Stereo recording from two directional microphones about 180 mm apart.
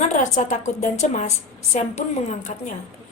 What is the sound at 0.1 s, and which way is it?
Speech, 45° left (ahead or behind).